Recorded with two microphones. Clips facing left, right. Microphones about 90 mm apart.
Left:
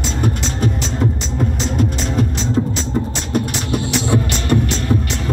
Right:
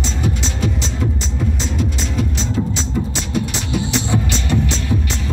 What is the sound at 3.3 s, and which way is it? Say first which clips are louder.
Music: left 2 dB; 55° left (ahead or behind).